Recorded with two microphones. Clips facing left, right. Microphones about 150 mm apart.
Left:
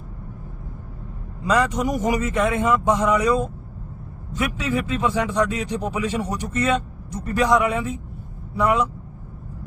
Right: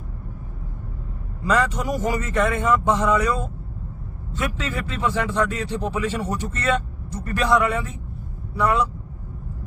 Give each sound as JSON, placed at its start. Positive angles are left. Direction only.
{"t": 1.4, "sound": "speech", "side_deg": 15}